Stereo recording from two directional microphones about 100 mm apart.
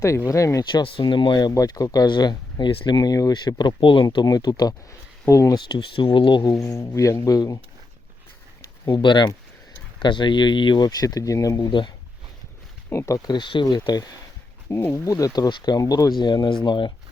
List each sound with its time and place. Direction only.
0.3 s speech: 30° left (ahead or behind)
0.6 s speech: 55° left (ahead or behind)
2.6 s speech: 55° left (ahead or behind)
4.0 s speech: 45° left (ahead or behind)
5.5 s speech: 55° left (ahead or behind)
6.6 s speech: 35° left (ahead or behind)
8.9 s speech: 50° left (ahead or behind); by 11.7 s 35° left (ahead or behind)
11.7 s speech: 55° left (ahead or behind)
12.9 s speech: 30° left (ahead or behind); by 13.7 s 50° left (ahead or behind)
13.7 s speech: 40° left (ahead or behind)
14.7 s speech: 25° left (ahead or behind)
16.1 s speech: 50° left (ahead or behind)